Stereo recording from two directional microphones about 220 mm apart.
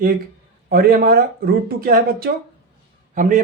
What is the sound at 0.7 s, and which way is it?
Speech, 45° right (ahead or behind).